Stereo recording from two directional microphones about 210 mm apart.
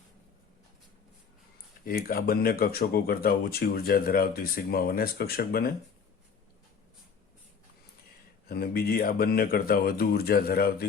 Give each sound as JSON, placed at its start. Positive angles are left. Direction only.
{"t": 1.8, "sound": "speech", "side_deg": 45}
{"t": 8.4, "sound": "speech", "side_deg": 45}